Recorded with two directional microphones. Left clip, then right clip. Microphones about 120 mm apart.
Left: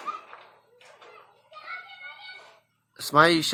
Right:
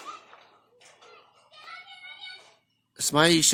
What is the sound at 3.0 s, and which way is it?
Speech, 80° right.